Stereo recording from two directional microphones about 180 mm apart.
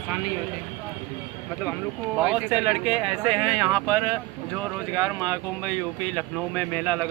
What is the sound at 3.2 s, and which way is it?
Speech, 25° right (ahead or behind).